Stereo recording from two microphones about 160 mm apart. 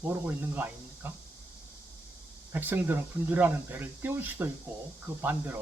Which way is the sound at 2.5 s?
10° right (ahead or behind).